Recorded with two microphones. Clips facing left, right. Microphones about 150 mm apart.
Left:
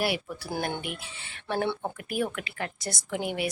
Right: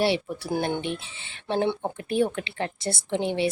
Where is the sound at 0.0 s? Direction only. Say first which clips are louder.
Right 5 dB; 25° right (ahead or behind).